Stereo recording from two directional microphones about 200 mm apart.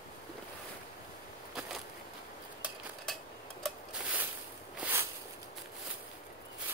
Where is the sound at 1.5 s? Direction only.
Centre (ahead or behind).